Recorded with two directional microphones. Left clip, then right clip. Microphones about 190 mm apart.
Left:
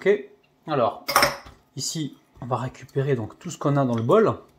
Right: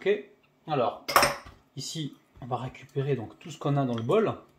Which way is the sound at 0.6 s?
30° left (ahead or behind).